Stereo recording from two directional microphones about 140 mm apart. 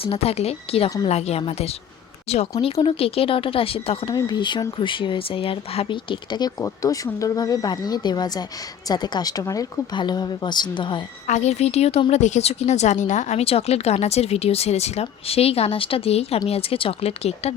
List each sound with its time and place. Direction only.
0.0 s a woman's voice: 45° left (ahead or behind)
4.1 s a woman's voice: 30° left (ahead or behind)
11.3 s a woman's voice: 55° left (ahead or behind)